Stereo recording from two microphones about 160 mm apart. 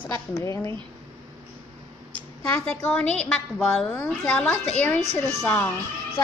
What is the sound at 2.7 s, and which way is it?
A woman's voice, 10° left (ahead or behind).